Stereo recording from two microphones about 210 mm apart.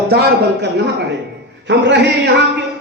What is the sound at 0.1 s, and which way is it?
A man's voice, 50° right (ahead or behind).